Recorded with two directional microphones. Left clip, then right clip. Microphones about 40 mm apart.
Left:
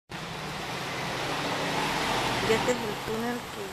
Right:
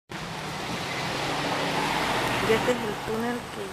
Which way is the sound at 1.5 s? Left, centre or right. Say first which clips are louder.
Right 2 dB; right.